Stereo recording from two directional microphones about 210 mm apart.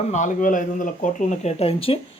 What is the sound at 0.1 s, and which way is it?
A man's voice, 35° left (ahead or behind).